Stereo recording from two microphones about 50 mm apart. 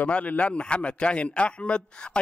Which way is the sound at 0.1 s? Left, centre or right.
Left.